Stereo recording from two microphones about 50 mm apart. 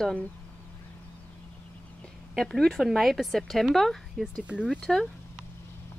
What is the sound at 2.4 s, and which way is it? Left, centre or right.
Speech, centre.